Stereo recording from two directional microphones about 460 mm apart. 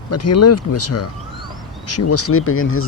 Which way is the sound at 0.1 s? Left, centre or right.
Left.